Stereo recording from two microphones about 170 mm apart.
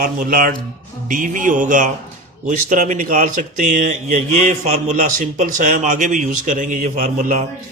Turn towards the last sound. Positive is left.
turn(degrees=-50)  # may be behind; listen again after turning